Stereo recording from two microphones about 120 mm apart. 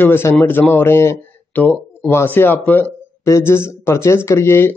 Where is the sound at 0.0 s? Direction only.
20° left (ahead or behind).